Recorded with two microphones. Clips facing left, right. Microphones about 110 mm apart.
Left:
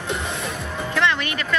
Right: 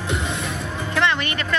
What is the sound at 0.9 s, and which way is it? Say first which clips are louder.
Music: right 1 dB; centre (ahead or behind).